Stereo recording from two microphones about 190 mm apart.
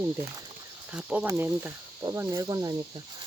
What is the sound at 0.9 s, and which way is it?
Speech, 5° right (ahead or behind).